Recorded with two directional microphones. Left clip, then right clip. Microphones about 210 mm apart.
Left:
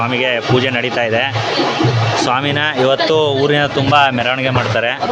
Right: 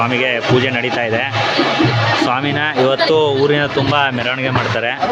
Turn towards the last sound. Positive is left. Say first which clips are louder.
# left 3 dB
turn(degrees=5)  # may be behind; listen again after turning